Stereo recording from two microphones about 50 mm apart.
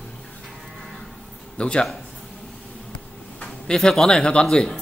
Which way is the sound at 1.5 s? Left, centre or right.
Centre.